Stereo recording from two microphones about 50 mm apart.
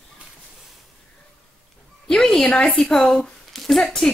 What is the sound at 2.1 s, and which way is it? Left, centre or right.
A woman's voice, centre.